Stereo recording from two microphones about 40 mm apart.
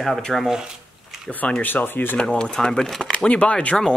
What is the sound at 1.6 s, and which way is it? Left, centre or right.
Speech, left.